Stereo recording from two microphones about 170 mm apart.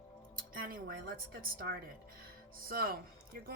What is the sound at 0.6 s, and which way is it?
Speech, 60° right (ahead or behind).